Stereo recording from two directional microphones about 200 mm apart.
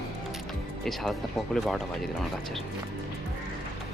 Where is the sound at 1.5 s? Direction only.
Centre (ahead or behind).